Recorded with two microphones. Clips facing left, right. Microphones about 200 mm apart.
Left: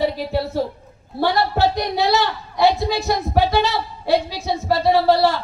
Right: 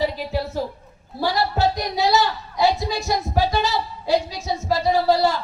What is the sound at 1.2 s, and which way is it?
Speech, 60° left (ahead or behind).